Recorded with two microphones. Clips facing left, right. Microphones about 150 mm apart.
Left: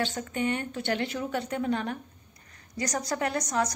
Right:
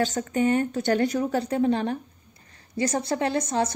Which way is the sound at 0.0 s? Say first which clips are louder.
Right 6 dB; 40° right (ahead or behind).